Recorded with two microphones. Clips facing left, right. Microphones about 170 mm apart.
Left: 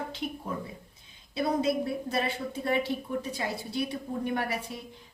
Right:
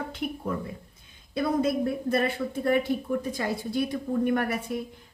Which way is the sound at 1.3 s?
50° right (ahead or behind).